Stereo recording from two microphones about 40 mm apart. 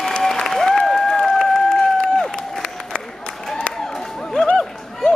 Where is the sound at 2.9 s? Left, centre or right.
Left.